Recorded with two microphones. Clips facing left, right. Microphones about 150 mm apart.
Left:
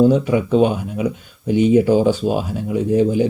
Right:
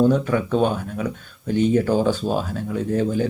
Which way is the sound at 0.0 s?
10° left (ahead or behind).